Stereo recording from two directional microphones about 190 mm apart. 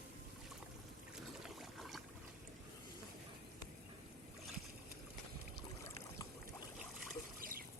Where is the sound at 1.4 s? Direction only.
Centre (ahead or behind).